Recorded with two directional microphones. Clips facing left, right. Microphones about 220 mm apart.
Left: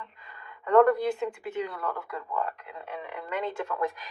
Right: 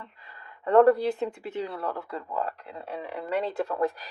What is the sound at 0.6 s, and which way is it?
Speech, 35° right (ahead or behind).